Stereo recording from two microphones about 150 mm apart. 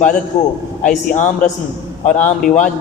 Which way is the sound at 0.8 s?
60° left (ahead or behind).